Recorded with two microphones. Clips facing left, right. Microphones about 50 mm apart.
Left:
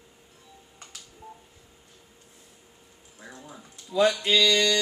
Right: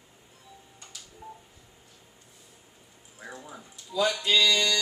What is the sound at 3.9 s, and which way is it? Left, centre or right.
Music, left.